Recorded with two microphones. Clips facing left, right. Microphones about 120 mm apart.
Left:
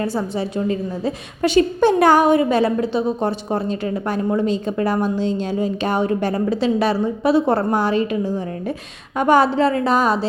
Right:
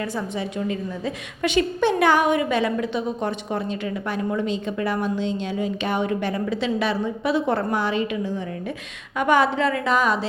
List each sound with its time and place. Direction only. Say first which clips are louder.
0.0 s a woman's voice: left 5 dB; 35° left (ahead or behind)